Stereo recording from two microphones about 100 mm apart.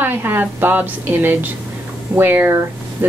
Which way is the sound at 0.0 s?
20° right (ahead or behind).